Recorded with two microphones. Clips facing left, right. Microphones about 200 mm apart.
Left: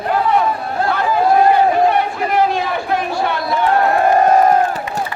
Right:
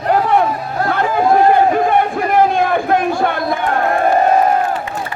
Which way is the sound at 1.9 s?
50° right (ahead or behind).